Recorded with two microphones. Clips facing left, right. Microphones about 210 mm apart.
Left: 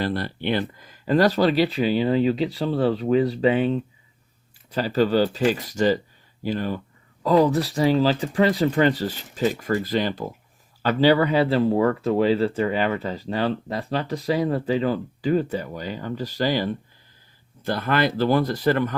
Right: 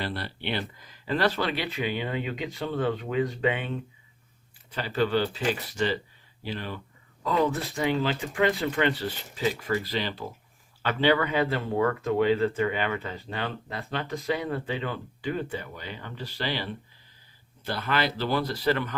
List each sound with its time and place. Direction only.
0.0 s speech: 45° left (ahead or behind)
4.7 s speech: 40° left (ahead or behind)